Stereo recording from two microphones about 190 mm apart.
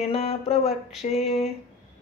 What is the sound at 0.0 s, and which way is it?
Speech, 30° left (ahead or behind).